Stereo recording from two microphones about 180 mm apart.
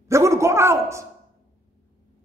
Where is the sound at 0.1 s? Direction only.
15° right (ahead or behind).